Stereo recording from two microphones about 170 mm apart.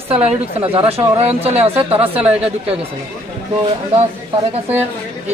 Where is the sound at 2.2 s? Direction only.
10° right (ahead or behind).